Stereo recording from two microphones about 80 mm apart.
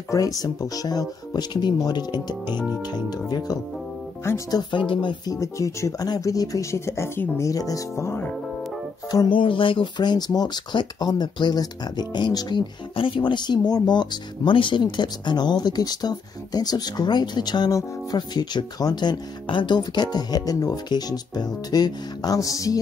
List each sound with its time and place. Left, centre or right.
0.1 s speech: left
4.2 s speech: left
4.6 s speech: left
5.3 s speech: left
9.3 s speech: left